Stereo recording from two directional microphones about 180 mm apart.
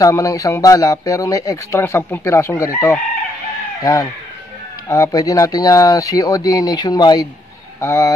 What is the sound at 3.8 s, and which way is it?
Speech, 20° left (ahead or behind).